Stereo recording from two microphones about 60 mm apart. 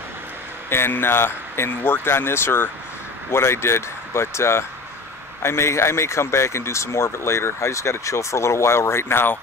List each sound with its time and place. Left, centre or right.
0.7 s speech: left